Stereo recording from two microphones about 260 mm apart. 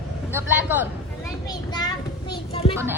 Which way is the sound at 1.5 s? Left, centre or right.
Centre.